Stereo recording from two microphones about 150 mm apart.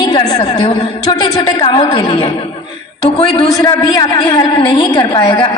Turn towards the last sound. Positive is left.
turn(degrees=25)  # may be behind; listen again after turning